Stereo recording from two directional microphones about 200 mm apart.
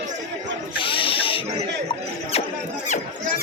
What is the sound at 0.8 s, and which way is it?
Snake, 25° left (ahead or behind).